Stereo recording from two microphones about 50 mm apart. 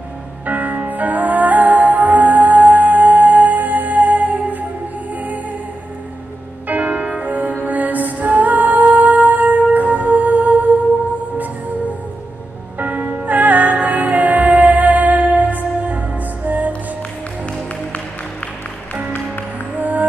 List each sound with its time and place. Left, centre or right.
0.5 s music: right
6.7 s music: right
12.7 s music: right
19.8 s music: right